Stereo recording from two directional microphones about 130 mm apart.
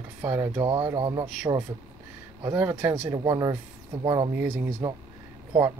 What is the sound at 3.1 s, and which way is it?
Speech, 30° right (ahead or behind).